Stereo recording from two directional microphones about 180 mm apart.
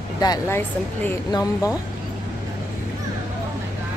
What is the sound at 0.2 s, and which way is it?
Speech, 20° left (ahead or behind).